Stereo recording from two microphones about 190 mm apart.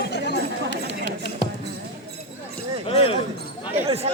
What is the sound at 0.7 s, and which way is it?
Music, 70° left (ahead or behind).